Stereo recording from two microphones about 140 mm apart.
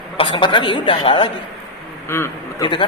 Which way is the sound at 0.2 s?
35° left (ahead or behind).